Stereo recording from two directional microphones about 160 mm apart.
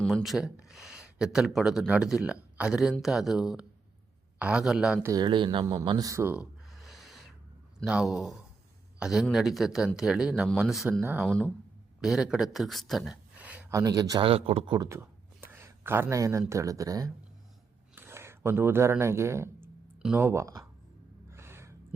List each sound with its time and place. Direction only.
0.0 s speech: centre (ahead or behind)
5.0 s speech: 25° right (ahead or behind)
5.8 s a sound: 25° right (ahead or behind); by 7.2 s centre (ahead or behind)
7.9 s speech: 5° right (ahead or behind)
11.0 s speech: 10° right (ahead or behind)
11.3 s speech: 5° left (ahead or behind)
13.3 s a sound: 10° right (ahead or behind)
13.7 s speech: 20° right (ahead or behind)
14.3 s speech: 40° right (ahead or behind)
14.8 s a sound: 15° right (ahead or behind)
16.5 s speech: 20° right (ahead or behind)
17.9 s a sound: 15° right (ahead or behind)